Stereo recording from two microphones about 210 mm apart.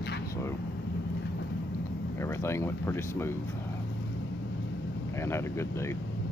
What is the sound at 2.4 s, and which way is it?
Speech, 10° left (ahead or behind).